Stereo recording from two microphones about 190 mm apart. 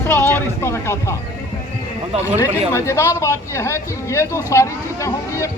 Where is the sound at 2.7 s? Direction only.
15° left (ahead or behind).